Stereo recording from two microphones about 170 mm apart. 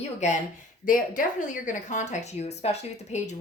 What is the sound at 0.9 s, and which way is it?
Speech, 50° left (ahead or behind).